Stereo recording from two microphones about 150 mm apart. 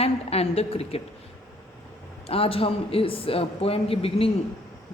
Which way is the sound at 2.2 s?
40° left (ahead or behind).